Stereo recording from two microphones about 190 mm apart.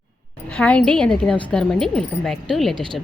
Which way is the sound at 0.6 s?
5° left (ahead or behind).